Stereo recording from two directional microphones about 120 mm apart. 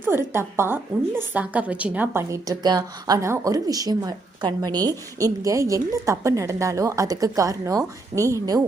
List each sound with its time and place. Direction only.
0.0 s a woman's voice: 20° right (ahead or behind)
2.3 s speech: 30° right (ahead or behind)